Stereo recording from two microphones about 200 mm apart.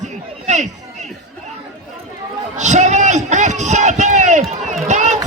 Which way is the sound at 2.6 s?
35° right (ahead or behind).